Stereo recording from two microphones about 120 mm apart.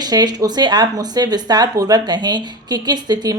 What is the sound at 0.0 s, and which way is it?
Speech, 35° right (ahead or behind).